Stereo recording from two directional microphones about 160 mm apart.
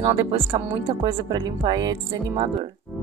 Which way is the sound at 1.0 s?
25° right (ahead or behind).